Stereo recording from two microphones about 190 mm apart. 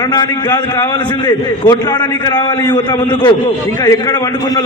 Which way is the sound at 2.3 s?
25° left (ahead or behind).